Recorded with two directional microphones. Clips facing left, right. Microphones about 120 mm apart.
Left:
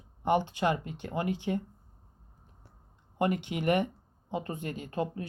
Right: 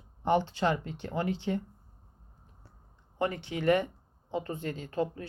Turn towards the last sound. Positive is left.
turn(degrees=15)  # may be behind; listen again after turning